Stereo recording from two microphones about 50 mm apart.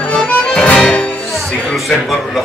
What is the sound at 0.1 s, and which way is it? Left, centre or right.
Music, left.